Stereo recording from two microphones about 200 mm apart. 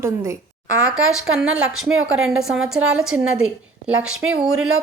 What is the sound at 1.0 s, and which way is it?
A woman's voice, 5° right (ahead or behind).